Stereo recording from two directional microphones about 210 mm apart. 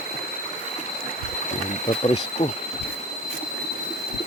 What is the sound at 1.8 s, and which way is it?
Speech, 30° left (ahead or behind).